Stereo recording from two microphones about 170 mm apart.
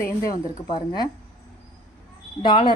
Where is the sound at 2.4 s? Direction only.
30° left (ahead or behind).